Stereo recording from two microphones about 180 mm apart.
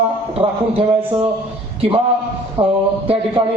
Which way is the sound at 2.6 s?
30° right (ahead or behind).